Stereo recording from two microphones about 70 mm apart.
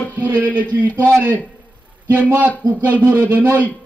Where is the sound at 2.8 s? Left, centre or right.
Right.